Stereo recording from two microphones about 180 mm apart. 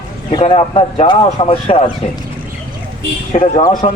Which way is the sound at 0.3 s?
30° left (ahead or behind).